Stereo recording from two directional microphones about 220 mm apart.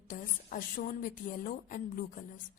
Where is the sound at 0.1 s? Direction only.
40° left (ahead or behind).